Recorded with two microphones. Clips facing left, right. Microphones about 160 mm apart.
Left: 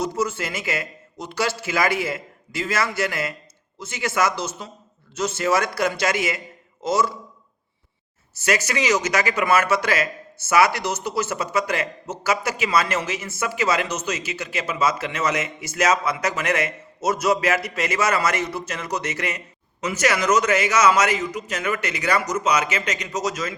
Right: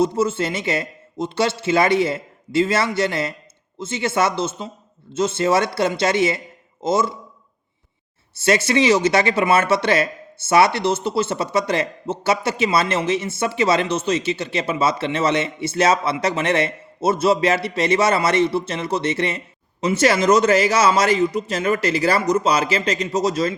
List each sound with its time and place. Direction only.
0.0 s speech: 25° right (ahead or behind)
8.4 s speech: 25° right (ahead or behind)